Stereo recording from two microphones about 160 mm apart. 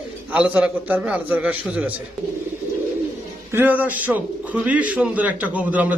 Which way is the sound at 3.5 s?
10° right (ahead or behind).